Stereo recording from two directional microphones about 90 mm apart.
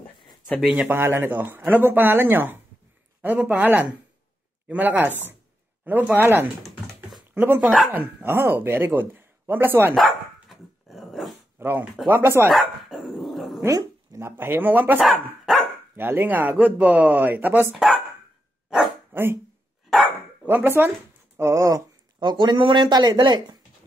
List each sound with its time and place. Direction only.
0.7 s speech: 20° right (ahead or behind)
10.5 s dog: centre (ahead or behind)
11.6 s speech: 20° right (ahead or behind)
12.5 s dog: centre (ahead or behind)
13.7 s speech: 35° right (ahead or behind); by 15.0 s 20° right (ahead or behind)
15.0 s speech: centre (ahead or behind)
16.0 s speech: 20° right (ahead or behind)
17.7 s speech: centre (ahead or behind)
19.1 s a sound: 25° right (ahead or behind)
19.9 s dog: centre (ahead or behind)
20.4 s speech: 25° right (ahead or behind)
21.4 s speech: 35° right (ahead or behind)
22.2 s speech: 55° right (ahead or behind)